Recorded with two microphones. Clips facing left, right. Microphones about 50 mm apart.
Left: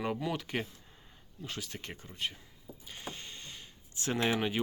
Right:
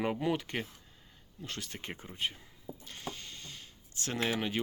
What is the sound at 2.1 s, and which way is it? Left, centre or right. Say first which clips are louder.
Speech: right 1 dB; centre.